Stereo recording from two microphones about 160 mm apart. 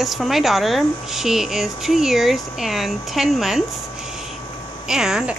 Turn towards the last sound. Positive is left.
turn(degrees=-5)  # may be behind; listen again after turning